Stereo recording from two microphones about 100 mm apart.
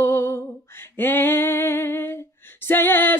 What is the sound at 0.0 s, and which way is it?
Female singing, 25° left (ahead or behind).